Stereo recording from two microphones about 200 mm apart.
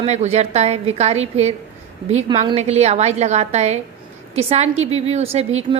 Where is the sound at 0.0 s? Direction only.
35° right (ahead or behind).